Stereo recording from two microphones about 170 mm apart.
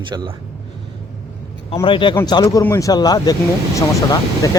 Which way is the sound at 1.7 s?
30° left (ahead or behind).